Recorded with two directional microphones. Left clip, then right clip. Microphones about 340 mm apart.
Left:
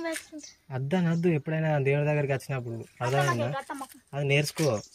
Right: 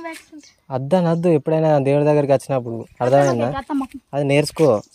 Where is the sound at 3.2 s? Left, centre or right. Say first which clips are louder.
Right 10 dB; right.